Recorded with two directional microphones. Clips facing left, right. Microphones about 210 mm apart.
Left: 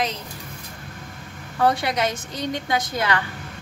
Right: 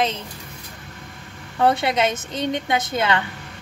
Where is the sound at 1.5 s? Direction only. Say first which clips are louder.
Right 2 dB; 25° right (ahead or behind).